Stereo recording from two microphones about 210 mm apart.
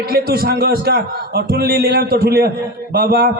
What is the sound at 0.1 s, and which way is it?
A man's voice, 50° right (ahead or behind).